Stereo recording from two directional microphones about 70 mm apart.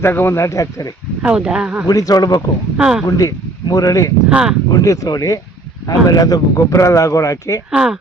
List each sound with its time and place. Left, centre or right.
0.0 s speech: left
1.2 s speech: centre
1.9 s speech: left
2.7 s speech: centre
3.1 s speech: left
4.3 s speech: centre
4.7 s speech: left
7.7 s speech: centre